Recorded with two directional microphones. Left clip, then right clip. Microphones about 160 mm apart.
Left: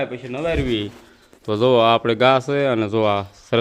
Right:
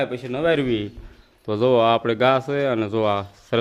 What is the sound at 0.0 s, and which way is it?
Speech, 20° right (ahead or behind).